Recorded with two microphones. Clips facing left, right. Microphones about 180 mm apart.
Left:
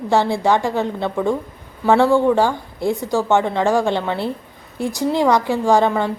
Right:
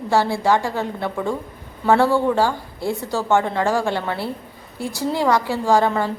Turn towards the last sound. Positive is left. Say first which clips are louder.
# left 2 dB
turn(degrees=20)  # may be behind; listen again after turning